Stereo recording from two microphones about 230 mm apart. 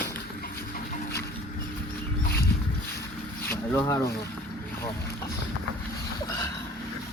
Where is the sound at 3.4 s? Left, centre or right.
Centre.